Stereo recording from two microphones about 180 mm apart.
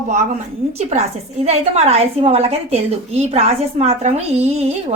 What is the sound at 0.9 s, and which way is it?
A woman's voice, 40° right (ahead or behind).